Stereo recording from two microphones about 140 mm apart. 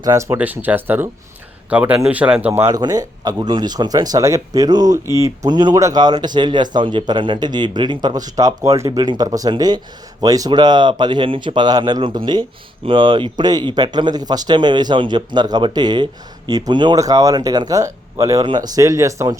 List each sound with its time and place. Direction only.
0.0 s speech: 20° right (ahead or behind)
2.5 s speech: 20° right (ahead or behind)